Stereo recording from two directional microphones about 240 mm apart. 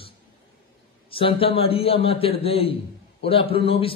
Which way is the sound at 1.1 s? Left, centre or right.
Left.